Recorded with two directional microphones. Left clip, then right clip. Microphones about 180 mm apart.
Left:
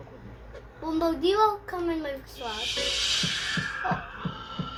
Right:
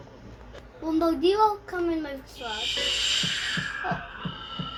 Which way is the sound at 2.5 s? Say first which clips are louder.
Right 2 dB; 25° left (ahead or behind).